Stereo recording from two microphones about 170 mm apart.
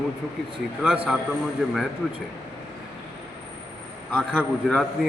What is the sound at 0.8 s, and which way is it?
Speech, 5° right (ahead or behind).